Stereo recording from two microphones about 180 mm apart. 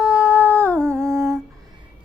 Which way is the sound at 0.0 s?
5° right (ahead or behind).